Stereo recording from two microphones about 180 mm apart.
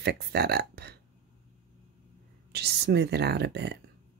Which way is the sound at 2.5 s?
65° right (ahead or behind).